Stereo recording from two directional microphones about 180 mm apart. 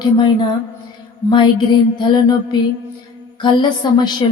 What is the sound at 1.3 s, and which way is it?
Mantra, 25° left (ahead or behind).